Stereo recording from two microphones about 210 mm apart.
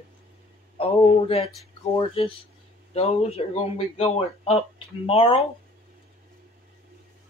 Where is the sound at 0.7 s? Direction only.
25° left (ahead or behind).